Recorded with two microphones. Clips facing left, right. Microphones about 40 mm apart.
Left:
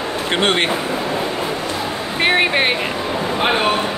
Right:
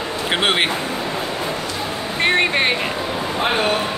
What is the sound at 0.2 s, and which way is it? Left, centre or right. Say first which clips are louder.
Speech: left 1 dB; centre.